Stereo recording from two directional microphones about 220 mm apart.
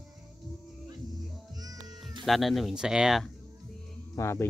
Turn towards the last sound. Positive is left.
turn(degrees=15)  # may be behind; listen again after turning